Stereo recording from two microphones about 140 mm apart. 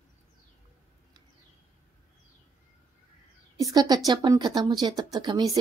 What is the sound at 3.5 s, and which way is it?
A woman's voice, 25° right (ahead or behind).